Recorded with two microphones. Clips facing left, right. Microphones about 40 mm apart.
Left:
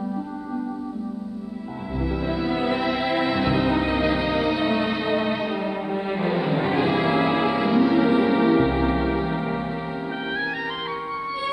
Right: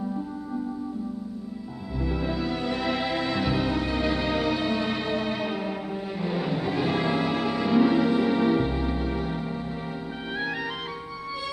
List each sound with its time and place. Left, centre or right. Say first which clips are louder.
2.0 s music: left 3 dB; centre
6.9 s music: left 5 dB; centre
7.7 s music: left 1 dB; centre; by 9.4 s left